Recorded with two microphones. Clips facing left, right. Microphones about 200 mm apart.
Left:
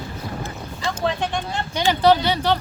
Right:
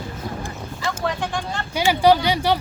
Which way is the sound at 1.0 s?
20° left (ahead or behind).